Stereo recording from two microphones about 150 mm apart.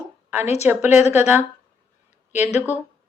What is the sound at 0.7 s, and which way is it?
Speech, 15° right (ahead or behind).